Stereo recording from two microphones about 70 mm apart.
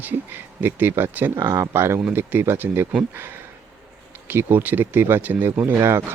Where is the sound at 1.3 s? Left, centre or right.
Right.